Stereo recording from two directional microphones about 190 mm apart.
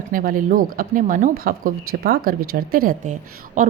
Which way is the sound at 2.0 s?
55° right (ahead or behind).